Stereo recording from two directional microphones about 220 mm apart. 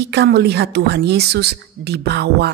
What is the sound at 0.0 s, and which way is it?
Speech, 50° right (ahead or behind).